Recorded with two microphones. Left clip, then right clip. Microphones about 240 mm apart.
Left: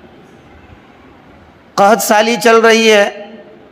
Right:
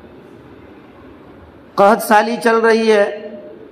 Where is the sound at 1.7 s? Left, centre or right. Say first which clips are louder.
Left 2 dB; left.